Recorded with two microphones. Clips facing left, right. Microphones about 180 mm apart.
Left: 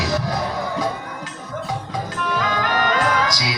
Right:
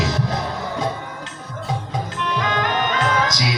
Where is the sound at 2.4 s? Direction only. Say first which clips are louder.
Even; 20° right (ahead or behind).